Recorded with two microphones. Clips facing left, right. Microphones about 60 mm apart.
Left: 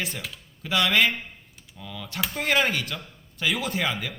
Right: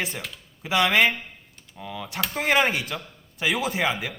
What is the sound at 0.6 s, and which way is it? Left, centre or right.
Speech, right.